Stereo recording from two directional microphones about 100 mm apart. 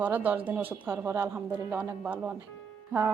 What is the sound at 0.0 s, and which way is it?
A woman's voice, 15° right (ahead or behind).